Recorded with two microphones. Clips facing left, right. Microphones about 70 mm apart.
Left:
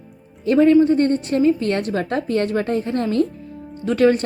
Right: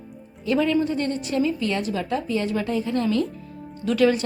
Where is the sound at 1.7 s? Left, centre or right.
Left.